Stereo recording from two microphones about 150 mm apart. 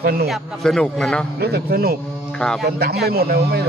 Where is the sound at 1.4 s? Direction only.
90° right.